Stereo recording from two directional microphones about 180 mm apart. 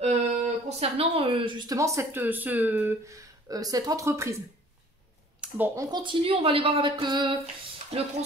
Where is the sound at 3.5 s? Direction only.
20° right (ahead or behind).